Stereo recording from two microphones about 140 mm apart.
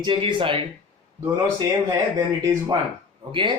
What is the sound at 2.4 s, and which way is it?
Speech, 25° right (ahead or behind).